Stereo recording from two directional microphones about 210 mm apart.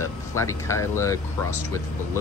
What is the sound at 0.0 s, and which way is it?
Speech, 15° left (ahead or behind).